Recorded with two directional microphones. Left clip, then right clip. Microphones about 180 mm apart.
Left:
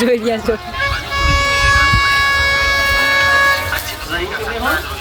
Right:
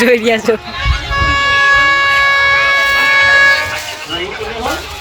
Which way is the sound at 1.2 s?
55° left (ahead or behind).